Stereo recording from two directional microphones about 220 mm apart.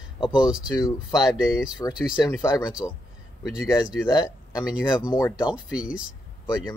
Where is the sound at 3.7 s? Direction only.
20° left (ahead or behind).